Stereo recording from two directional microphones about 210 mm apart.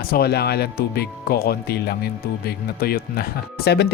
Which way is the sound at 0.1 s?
50° left (ahead or behind).